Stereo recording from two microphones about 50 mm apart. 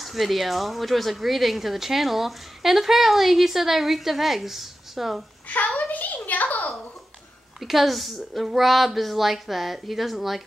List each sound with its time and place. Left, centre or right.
0.0 s speech: centre
5.8 s a sound: left
7.6 s speech: centre